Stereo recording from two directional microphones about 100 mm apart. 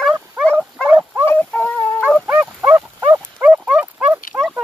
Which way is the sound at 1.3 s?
15° left (ahead or behind).